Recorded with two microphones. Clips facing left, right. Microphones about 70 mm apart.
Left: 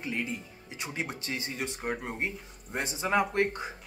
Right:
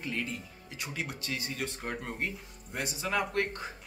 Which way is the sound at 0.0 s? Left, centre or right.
Centre.